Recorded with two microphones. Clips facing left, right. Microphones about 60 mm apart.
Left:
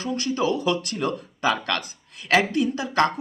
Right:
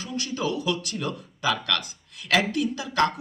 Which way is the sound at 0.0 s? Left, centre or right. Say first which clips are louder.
Left 5 dB; left.